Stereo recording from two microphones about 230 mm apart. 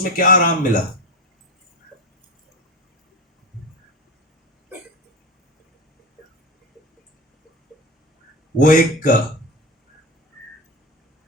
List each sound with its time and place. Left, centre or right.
0.2 s speech: left
8.5 s speech: left